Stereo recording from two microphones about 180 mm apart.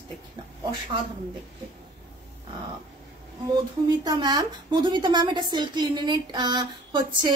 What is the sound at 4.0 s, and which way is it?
A woman's voice, 25° right (ahead or behind).